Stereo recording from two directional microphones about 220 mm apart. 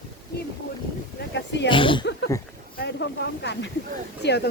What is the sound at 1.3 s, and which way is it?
Speech, 55° left (ahead or behind).